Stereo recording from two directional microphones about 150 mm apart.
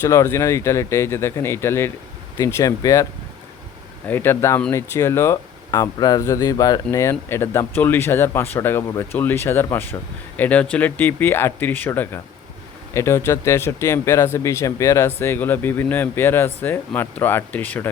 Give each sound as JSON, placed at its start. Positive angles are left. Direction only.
{"t": 0.0, "sound": "speech", "side_deg": 20}